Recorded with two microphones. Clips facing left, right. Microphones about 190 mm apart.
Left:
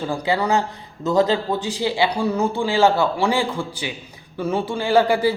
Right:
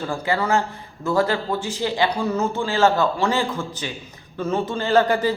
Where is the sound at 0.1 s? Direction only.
15° left (ahead or behind).